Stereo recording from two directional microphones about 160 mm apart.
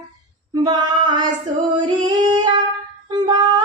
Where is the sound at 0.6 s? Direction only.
25° right (ahead or behind).